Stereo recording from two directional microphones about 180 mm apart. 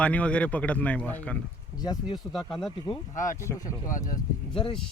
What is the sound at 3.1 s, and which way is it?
Speech, 45° left (ahead or behind).